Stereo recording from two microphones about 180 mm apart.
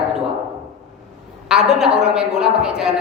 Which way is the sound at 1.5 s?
5° right (ahead or behind).